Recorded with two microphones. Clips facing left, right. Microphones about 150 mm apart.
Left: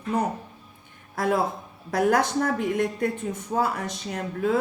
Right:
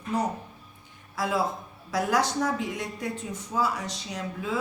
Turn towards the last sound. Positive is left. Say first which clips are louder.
# left 7 dB
turn(degrees=55)  # may be behind; listen again after turning